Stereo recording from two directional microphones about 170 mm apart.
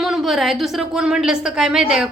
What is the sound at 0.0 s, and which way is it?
A woman's voice, centre (ahead or behind).